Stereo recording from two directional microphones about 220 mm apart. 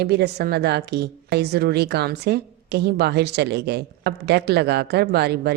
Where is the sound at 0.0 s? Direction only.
50° right (ahead or behind).